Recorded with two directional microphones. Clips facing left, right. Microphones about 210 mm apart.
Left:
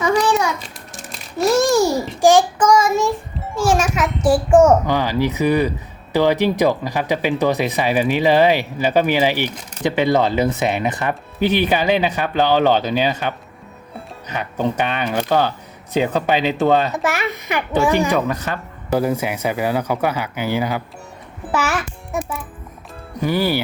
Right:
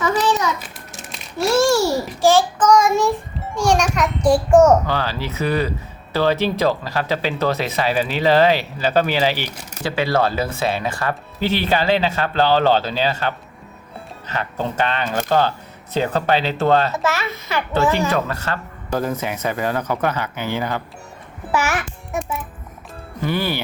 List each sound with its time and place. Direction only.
0.0 s a sound: 15° left (ahead or behind)
2.2 s music: 15° left (ahead or behind)
6.1 s speech: 15° left (ahead or behind)
23.2 s speech: 10° left (ahead or behind)